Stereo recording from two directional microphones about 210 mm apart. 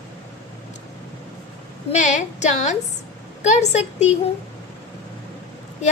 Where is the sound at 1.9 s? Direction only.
35° left (ahead or behind).